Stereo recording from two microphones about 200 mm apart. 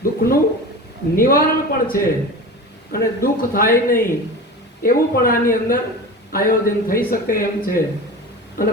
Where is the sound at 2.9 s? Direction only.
45° left (ahead or behind).